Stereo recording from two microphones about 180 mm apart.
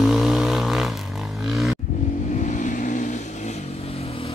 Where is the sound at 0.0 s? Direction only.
Centre (ahead or behind).